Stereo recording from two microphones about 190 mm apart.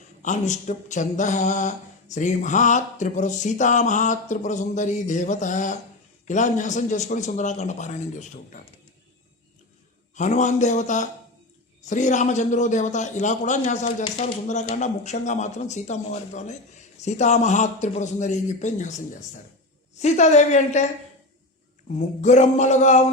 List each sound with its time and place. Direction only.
0.2 s speech: 40° left (ahead or behind)
10.2 s speech: 40° left (ahead or behind)
21.9 s speech: 40° left (ahead or behind)